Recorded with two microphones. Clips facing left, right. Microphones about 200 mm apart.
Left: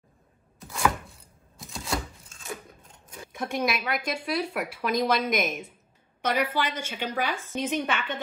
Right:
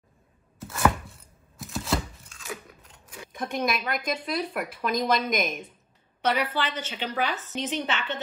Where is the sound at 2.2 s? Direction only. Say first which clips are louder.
Even; 25° left (ahead or behind).